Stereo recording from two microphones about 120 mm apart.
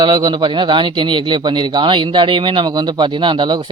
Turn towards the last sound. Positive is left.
turn(degrees=-40)  # may be behind; listen again after turning